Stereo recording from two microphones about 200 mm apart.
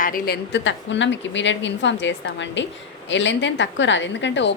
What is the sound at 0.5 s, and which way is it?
A woman's voice, 65° left (ahead or behind).